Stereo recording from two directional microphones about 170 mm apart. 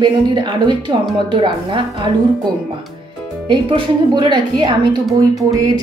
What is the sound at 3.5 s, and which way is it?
A woman's voice, 30° right (ahead or behind).